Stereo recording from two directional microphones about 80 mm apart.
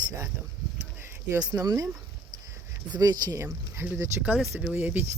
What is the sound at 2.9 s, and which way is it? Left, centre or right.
Speech, right.